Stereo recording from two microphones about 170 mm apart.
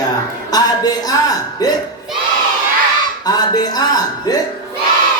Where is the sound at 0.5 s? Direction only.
20° left (ahead or behind).